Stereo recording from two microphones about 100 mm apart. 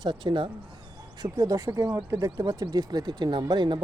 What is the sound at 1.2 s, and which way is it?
Speech, 40° right (ahead or behind).